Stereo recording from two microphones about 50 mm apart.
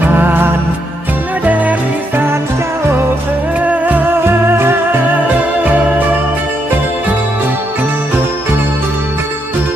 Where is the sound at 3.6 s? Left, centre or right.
Right.